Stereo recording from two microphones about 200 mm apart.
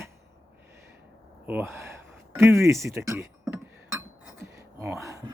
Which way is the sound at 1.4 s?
10° right (ahead or behind).